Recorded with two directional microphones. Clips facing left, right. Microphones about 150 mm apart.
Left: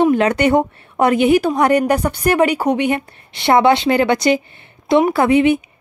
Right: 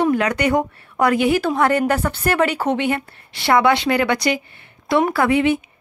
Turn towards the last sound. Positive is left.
turn(degrees=20)  # may be behind; listen again after turning